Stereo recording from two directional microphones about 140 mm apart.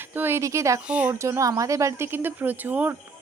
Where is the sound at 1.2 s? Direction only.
20° right (ahead or behind).